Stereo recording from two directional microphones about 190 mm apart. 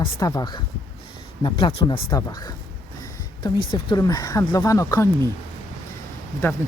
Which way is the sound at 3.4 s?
20° left (ahead or behind).